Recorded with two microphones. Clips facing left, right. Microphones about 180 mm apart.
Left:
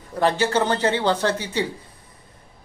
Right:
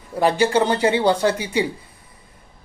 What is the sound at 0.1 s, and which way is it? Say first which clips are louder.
Speech: right 3 dB; 10° right (ahead or behind).